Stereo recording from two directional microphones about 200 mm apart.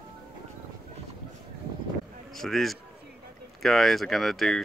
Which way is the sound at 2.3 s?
Centre (ahead or behind).